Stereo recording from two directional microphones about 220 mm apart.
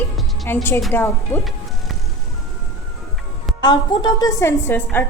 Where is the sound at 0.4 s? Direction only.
10° left (ahead or behind).